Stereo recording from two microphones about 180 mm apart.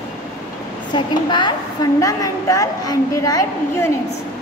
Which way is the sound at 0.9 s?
25° left (ahead or behind).